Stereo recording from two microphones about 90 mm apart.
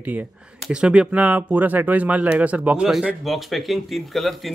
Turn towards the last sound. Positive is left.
turn(degrees=0)  # may be behind; listen again after turning